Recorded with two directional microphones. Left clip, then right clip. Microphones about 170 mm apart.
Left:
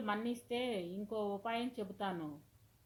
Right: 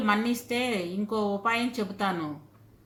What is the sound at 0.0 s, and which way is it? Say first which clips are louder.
A woman's voice: right 13 dB; 35° left (ahead or behind).